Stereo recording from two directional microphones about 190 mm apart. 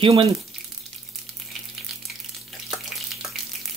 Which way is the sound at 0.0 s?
25° right (ahead or behind).